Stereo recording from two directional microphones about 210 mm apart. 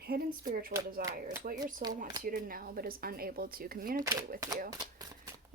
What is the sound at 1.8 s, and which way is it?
Speech, 45° right (ahead or behind).